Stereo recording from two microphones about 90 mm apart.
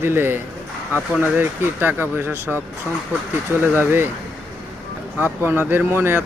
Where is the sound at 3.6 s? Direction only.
25° right (ahead or behind).